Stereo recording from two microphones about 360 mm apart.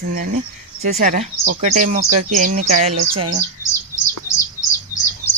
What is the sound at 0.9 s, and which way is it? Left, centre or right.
Speech, centre.